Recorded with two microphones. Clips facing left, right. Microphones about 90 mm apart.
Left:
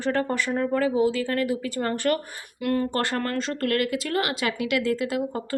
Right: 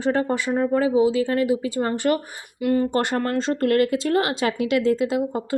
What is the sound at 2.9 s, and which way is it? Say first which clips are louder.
Speech: right 4 dB; 20° right (ahead or behind).